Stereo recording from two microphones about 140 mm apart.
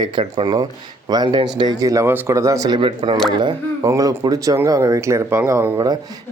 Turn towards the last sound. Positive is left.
turn(degrees=-15)  # may be behind; listen again after turning